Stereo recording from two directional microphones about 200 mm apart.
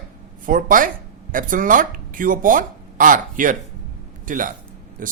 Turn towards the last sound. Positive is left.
turn(degrees=-40)  # may be behind; listen again after turning